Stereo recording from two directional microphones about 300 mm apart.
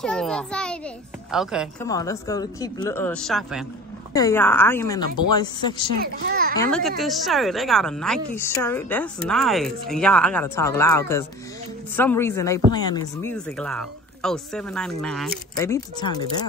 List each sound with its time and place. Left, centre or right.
0.0 s a woman's voice: centre
1.8 s speech: centre
5.9 s a child's voice: right
6.6 s a woman's voice: centre